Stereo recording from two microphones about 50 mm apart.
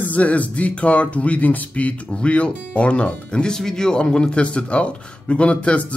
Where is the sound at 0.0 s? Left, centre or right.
Left.